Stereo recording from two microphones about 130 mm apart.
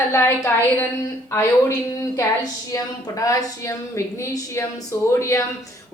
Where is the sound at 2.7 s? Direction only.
25° left (ahead or behind).